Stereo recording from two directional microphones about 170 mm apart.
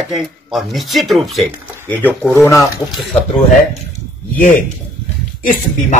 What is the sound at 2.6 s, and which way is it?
Speech, centre (ahead or behind).